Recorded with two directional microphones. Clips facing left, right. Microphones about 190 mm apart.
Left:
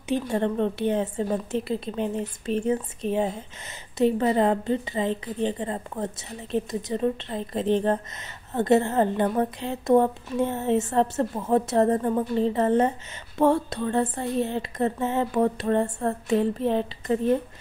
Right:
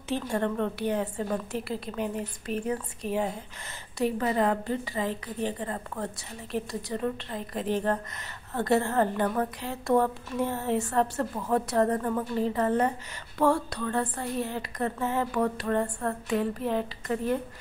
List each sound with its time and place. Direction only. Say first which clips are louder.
0.1 s a woman's voice: left 4 dB; 20° left (ahead or behind)